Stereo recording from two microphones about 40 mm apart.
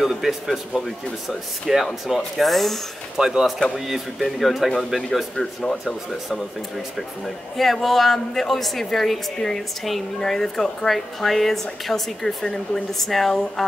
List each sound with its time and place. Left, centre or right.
0.0 s speech: centre
3.2 s speech: centre
7.5 s a woman's voice: centre